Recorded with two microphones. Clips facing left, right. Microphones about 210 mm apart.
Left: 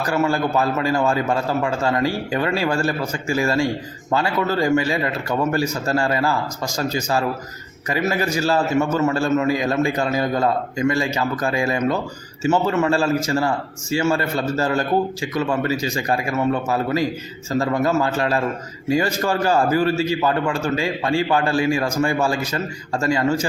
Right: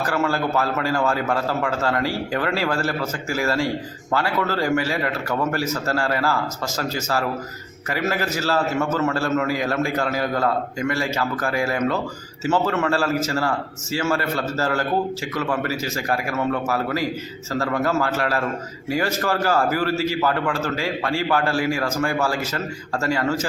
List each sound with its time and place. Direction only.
0.0 s a man's voice: 15° left (ahead or behind)